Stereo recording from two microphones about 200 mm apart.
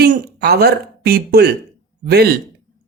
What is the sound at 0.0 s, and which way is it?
Speech, 50° right (ahead or behind).